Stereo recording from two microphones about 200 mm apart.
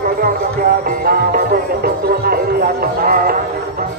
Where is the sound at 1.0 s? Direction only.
50° right (ahead or behind).